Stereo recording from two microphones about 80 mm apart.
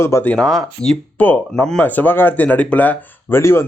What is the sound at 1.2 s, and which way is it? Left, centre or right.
Speech, left.